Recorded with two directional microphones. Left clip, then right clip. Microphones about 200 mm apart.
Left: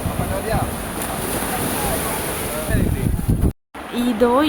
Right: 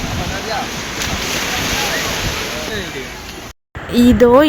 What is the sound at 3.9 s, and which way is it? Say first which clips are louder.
Speech: right 7 dB; 25° right (ahead or behind).